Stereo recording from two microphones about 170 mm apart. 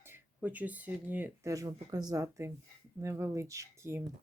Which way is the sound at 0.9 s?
10° right (ahead or behind).